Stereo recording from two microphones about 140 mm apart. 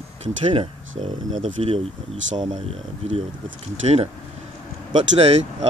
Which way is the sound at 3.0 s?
50° right (ahead or behind).